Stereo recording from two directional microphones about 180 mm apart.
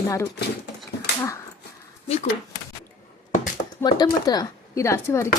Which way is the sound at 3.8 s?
20° left (ahead or behind).